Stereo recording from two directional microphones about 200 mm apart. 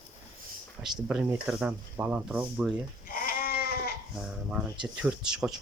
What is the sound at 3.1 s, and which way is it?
Goat, 45° left (ahead or behind).